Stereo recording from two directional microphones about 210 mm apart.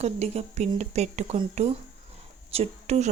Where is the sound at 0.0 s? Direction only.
30° right (ahead or behind).